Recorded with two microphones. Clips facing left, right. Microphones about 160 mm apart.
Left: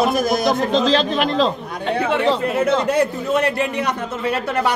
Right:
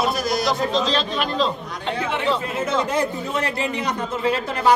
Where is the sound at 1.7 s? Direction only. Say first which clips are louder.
Left 5 dB; 60° left (ahead or behind).